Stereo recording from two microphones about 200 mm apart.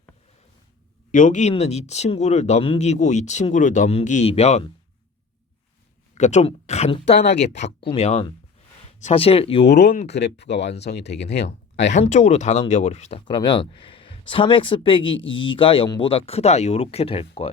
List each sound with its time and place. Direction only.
1.1 s speech: 40° left (ahead or behind)
6.1 s speech: 35° left (ahead or behind)
7.2 s speech: 55° left (ahead or behind)
7.4 s speech: 35° left (ahead or behind)
9.6 s speech: 55° left (ahead or behind)
11.9 s speech: 35° left (ahead or behind)
15.2 s speech: 70° left (ahead or behind)
15.4 s speech: 25° left (ahead or behind)